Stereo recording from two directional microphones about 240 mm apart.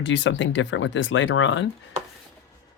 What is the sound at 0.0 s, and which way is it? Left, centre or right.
Speech, left.